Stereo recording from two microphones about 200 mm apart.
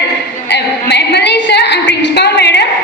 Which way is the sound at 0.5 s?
55° left (ahead or behind).